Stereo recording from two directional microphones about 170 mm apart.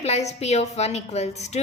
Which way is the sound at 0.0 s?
40° left (ahead or behind).